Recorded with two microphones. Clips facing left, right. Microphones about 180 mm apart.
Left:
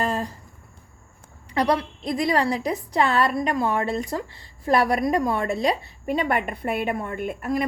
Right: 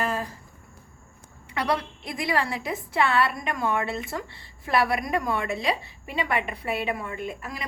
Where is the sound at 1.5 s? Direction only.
40° left (ahead or behind).